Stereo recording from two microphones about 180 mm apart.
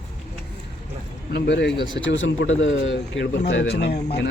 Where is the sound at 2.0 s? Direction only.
90° left.